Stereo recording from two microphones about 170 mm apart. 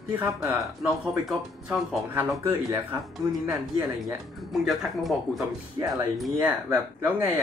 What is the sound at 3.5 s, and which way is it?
Speech, 15° right (ahead or behind).